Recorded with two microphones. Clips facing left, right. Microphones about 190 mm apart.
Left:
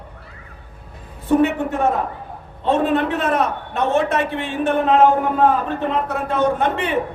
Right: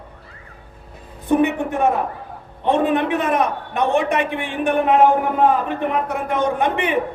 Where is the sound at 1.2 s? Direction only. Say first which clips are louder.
Left 1 dB; 15° right (ahead or behind).